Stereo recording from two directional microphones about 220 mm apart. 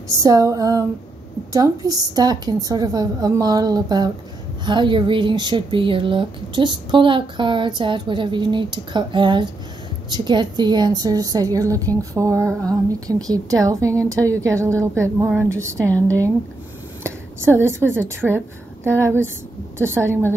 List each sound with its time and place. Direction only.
0.1 s a woman's voice: 15° right (ahead or behind)
17.0 s a sound: 10° right (ahead or behind)
17.6 s a woman's voice: 10° right (ahead or behind)